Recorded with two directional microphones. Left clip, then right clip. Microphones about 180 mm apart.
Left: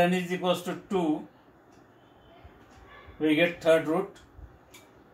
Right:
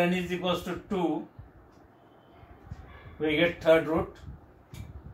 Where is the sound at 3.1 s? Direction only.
15° right (ahead or behind).